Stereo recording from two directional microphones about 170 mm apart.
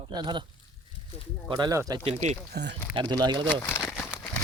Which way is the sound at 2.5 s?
90° right.